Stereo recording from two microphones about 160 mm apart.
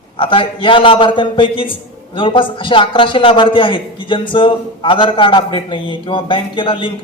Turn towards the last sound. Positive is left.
turn(degrees=30)  # may be behind; listen again after turning